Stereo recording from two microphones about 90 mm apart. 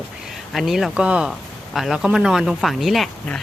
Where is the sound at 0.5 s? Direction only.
5° right (ahead or behind).